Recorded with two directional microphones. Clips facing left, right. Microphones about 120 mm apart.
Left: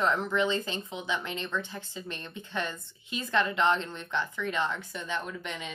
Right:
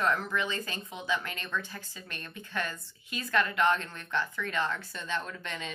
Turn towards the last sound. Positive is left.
turn(degrees=15)  # may be behind; listen again after turning